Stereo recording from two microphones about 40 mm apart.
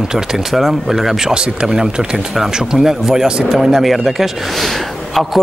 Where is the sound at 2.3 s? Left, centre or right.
Centre.